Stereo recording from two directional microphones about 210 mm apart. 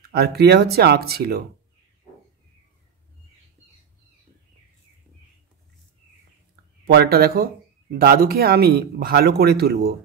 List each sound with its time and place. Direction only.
0.1 s speech: 50° right (ahead or behind)
6.8 s speech: 50° right (ahead or behind)